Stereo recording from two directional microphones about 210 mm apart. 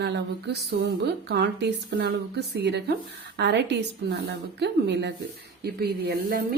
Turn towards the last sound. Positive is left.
turn(degrees=-50)  # may be behind; listen again after turning